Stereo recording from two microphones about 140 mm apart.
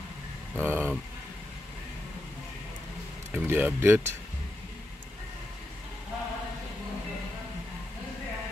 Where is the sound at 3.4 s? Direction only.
15° right (ahead or behind).